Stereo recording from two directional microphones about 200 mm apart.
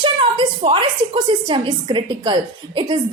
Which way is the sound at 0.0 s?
25° right (ahead or behind).